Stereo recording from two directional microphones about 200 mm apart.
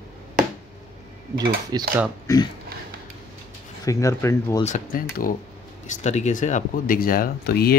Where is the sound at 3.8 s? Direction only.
15° left (ahead or behind).